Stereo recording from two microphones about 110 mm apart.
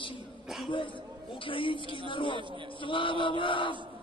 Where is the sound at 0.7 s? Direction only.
50° left (ahead or behind).